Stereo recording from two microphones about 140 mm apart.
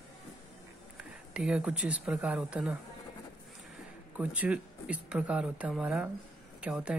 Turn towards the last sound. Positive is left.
turn(degrees=-10)  # may be behind; listen again after turning